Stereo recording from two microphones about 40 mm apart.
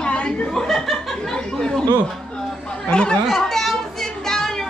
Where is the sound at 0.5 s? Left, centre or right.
Centre.